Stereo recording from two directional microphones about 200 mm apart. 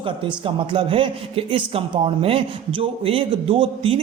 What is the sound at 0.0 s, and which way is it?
A man's voice, 25° right (ahead or behind).